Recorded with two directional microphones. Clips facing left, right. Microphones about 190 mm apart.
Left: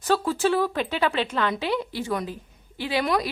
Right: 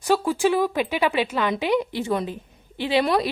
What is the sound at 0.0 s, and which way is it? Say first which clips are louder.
A woman's voice: right 2 dB; 10° right (ahead or behind).